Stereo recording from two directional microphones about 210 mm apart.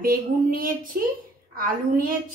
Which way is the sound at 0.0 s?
45° right (ahead or behind).